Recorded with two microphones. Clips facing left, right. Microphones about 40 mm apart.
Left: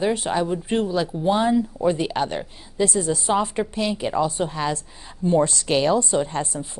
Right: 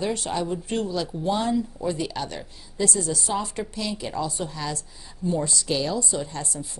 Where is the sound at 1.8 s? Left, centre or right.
Left.